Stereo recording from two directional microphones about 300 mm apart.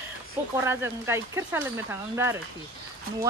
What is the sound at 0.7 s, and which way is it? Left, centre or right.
Speech, centre.